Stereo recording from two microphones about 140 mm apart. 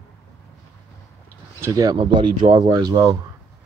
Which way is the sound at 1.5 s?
20° right (ahead or behind).